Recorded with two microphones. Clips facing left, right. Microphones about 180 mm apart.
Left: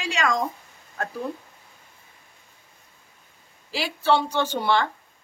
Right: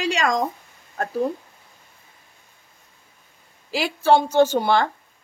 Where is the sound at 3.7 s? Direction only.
45° right (ahead or behind).